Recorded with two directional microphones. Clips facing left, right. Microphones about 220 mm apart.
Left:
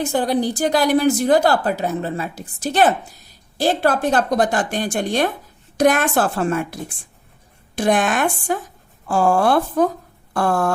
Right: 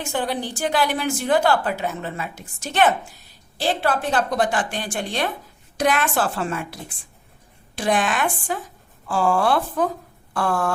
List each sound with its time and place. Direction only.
0.0 s a woman's voice: 35° left (ahead or behind)
7.8 s a woman's voice: 45° left (ahead or behind)